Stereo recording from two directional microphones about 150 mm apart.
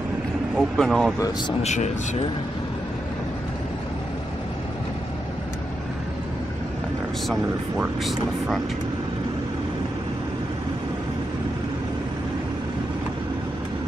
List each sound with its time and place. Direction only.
0.6 s speech: centre (ahead or behind)
1.6 s speech: 50° left (ahead or behind)
7.7 s speech: 5° right (ahead or behind)